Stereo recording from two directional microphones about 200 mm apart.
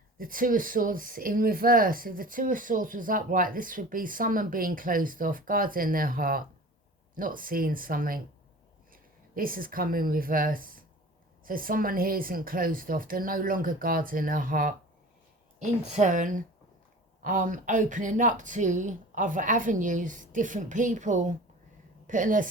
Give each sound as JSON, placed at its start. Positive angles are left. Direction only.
{"t": 0.2, "sound": "a woman's voice", "side_deg": -45}